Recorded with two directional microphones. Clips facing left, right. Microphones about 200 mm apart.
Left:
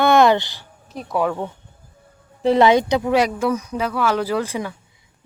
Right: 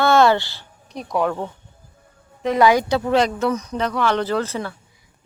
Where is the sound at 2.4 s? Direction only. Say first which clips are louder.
Left 2 dB; 30° left (ahead or behind); by 4.8 s 15° left (ahead or behind).